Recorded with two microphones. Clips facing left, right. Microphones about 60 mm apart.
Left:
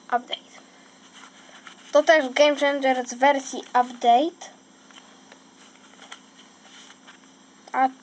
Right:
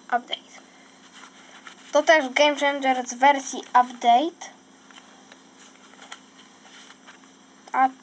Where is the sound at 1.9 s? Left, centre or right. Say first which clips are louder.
Left 1 dB; centre.